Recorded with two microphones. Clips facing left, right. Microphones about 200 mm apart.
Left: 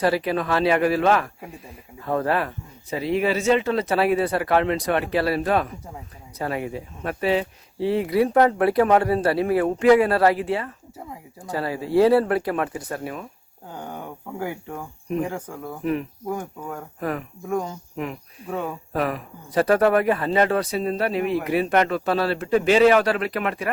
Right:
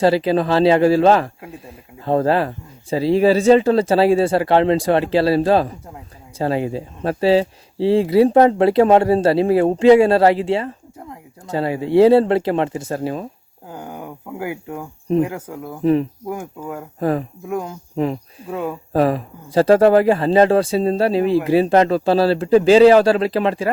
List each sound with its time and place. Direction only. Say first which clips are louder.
0.0 s speech: right 6 dB; 25° right (ahead or behind)
13.7 s speech: right 2 dB; 10° right (ahead or behind)
15.8 s speech: right 9 dB; 30° right (ahead or behind)
16.3 s speech: left 1 dB; 10° right (ahead or behind)
17.0 s speech: right 8 dB; 30° right (ahead or behind)
17.5 s speech: right 1 dB; 10° right (ahead or behind)
17.9 s speech: right 12 dB; 35° right (ahead or behind)